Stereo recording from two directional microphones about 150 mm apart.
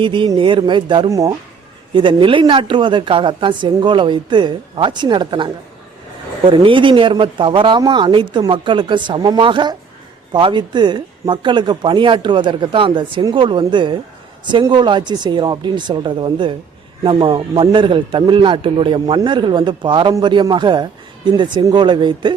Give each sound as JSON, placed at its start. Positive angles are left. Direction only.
{"t": 0.0, "sound": "speech", "side_deg": -35}